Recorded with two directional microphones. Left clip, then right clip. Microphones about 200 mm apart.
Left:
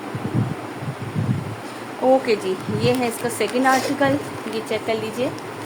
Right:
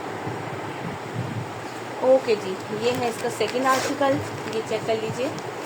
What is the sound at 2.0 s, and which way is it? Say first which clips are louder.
Speech: left 1 dB; 35° left (ahead or behind).